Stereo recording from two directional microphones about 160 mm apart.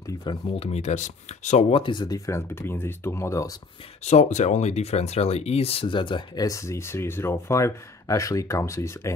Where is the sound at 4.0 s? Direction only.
45° left (ahead or behind).